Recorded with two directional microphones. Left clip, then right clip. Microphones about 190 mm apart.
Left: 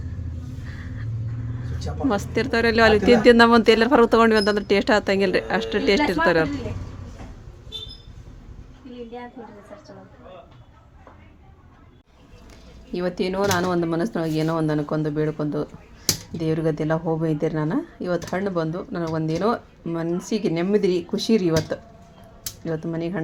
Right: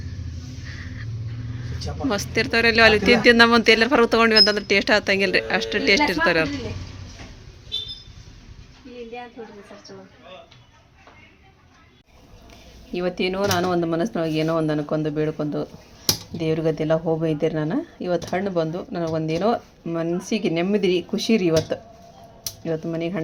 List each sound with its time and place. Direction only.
0.7 s music: 15° left (ahead or behind)
2.0 s speech: 15° left (ahead or behind)
12.9 s speech: 5° left (ahead or behind)